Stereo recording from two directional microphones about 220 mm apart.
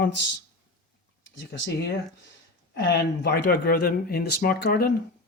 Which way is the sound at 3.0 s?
45° left (ahead or behind).